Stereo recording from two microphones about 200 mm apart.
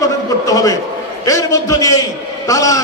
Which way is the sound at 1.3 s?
15° left (ahead or behind).